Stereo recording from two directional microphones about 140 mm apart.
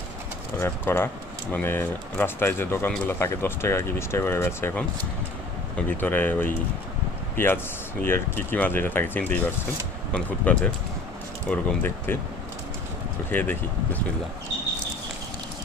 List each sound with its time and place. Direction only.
0.6 s speech: 15° left (ahead or behind)
6.0 s speech: 15° left (ahead or behind)
13.3 s speech: 15° left (ahead or behind)